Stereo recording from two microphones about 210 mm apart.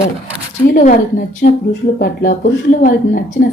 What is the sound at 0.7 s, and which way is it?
A woman's voice, 40° left (ahead or behind).